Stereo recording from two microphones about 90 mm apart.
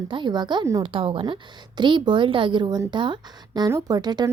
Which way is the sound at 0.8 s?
70° right (ahead or behind).